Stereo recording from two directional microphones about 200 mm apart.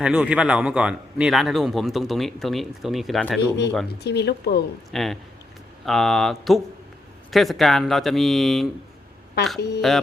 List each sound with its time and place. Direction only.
0.0 s a man's voice: 5° right (ahead or behind)
3.8 s speech: 55° left (ahead or behind)
4.9 s a man's voice: centre (ahead or behind)
9.6 s speech: 55° left (ahead or behind)